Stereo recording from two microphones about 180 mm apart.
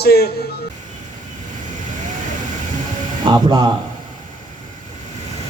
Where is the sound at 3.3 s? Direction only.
25° right (ahead or behind).